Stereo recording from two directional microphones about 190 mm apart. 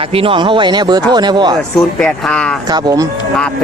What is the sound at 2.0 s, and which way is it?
Speech, 5° left (ahead or behind).